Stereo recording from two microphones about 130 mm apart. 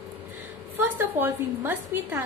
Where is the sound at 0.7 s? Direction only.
15° right (ahead or behind).